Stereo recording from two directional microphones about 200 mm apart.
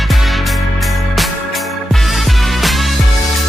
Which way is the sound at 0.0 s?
Centre (ahead or behind).